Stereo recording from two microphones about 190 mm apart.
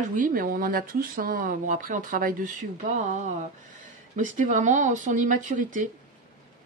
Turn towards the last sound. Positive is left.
turn(degrees=-45)  # may be behind; listen again after turning